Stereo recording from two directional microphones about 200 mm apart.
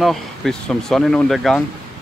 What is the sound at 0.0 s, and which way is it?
Speech, centre (ahead or behind).